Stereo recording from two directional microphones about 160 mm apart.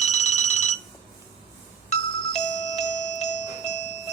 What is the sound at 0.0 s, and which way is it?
Telephone bell ringing, 45° left (ahead or behind).